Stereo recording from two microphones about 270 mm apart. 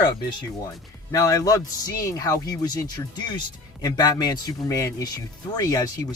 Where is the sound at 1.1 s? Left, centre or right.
Centre.